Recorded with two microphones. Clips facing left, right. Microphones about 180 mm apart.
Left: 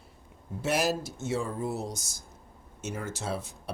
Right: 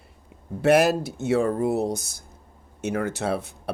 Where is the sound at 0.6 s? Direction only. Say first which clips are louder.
Right 10 dB; 60° right (ahead or behind).